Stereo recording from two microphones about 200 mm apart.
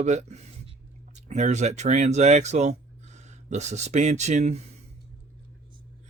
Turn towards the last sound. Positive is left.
turn(degrees=-35)  # may be behind; listen again after turning